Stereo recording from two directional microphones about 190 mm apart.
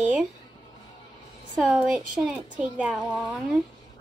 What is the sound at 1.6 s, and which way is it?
Speech, 5° right (ahead or behind).